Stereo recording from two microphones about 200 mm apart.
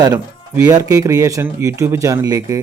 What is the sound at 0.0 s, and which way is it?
Speech, 15° right (ahead or behind).